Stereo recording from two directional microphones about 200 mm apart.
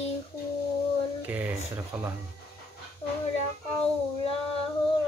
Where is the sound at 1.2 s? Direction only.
10° right (ahead or behind).